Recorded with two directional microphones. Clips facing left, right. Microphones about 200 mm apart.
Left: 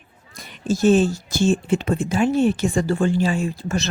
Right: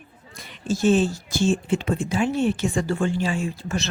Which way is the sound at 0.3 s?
40° left (ahead or behind).